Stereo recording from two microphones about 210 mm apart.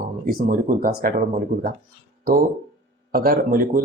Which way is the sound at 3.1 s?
45° right (ahead or behind).